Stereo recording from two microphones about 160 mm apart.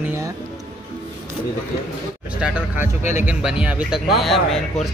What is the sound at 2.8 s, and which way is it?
Speech, 50° left (ahead or behind).